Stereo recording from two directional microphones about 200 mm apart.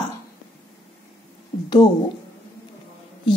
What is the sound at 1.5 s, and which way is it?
Speech, 30° left (ahead or behind).